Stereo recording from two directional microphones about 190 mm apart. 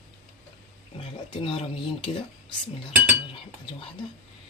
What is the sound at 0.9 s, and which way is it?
Speech, 30° left (ahead or behind).